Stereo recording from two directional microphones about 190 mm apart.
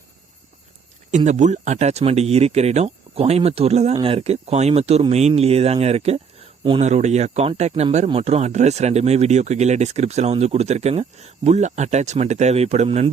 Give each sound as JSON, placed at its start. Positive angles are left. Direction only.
{"t": 1.1, "sound": "speech", "side_deg": -40}